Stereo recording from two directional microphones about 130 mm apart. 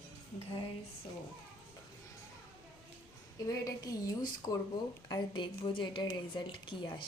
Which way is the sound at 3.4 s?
30° left (ahead or behind).